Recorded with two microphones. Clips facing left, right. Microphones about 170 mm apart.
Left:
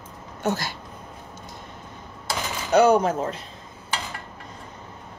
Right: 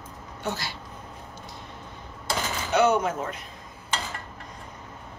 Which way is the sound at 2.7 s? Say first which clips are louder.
Left 5 dB; 35° left (ahead or behind).